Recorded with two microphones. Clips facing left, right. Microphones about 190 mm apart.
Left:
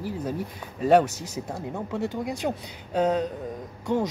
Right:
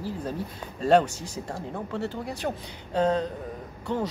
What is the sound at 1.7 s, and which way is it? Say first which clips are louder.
A man's voice: left 3 dB; 10° left (ahead or behind).